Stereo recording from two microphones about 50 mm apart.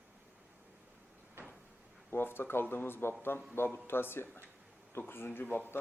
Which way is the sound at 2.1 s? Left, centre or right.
Left.